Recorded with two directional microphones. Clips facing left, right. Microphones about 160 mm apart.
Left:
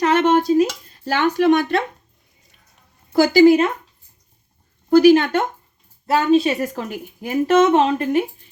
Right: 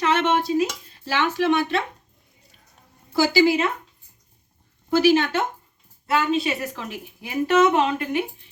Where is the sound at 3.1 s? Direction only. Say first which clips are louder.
Left 7 dB; 50° left (ahead or behind).